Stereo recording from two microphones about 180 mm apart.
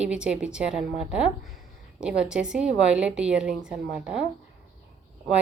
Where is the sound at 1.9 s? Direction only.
5° right (ahead or behind).